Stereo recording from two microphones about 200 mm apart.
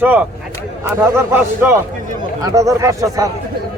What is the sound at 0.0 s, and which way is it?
Speech, 10° right (ahead or behind).